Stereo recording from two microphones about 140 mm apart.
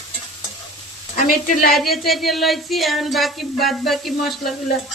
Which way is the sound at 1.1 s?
75° left (ahead or behind).